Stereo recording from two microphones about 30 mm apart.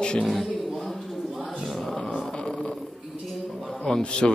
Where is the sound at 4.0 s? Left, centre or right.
Left.